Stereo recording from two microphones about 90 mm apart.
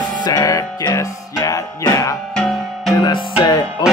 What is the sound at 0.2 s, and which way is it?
Music, 45° left (ahead or behind).